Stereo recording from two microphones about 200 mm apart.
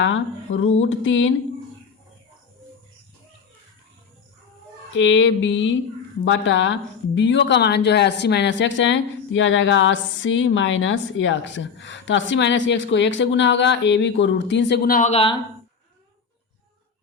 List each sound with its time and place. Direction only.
0.0 s speech: 70° left (ahead or behind)
4.9 s speech: 70° left (ahead or behind); by 15.1 s 45° left (ahead or behind)
15.1 s speech: 25° left (ahead or behind)